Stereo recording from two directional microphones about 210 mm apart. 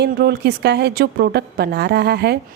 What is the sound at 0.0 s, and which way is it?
Speech, 50° right (ahead or behind).